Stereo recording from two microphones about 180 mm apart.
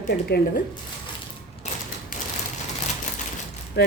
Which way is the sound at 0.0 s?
55° left (ahead or behind).